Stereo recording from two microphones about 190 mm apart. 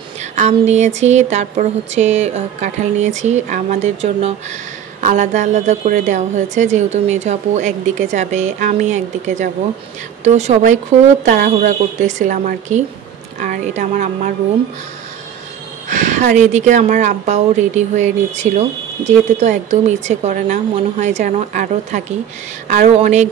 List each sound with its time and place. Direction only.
0.4 s speech: 35° right (ahead or behind)
15.9 s speech: 40° right (ahead or behind)